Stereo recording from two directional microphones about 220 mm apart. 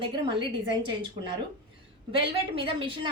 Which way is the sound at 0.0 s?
20° right (ahead or behind).